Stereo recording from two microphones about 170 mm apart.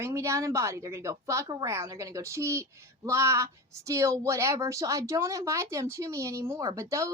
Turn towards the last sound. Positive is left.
turn(degrees=-20)  # may be behind; listen again after turning